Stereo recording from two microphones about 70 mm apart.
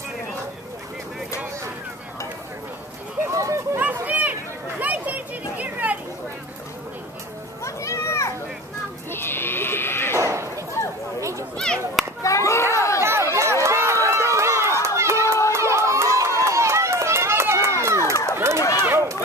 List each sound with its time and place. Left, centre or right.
3.3 s a sound: right
3.7 s a sound: right
7.6 s children playing: left
9.1 s sheep: left
10.1 s a sound: right
11.5 s a sound: centre
12.2 s children playing: left
12.7 s chatter: left
13.0 s run: right
14.0 s crowd: right
15.5 s run: right
18.6 s dog: left